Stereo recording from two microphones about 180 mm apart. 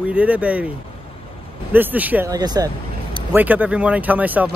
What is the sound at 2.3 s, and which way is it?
Speech, 20° right (ahead or behind).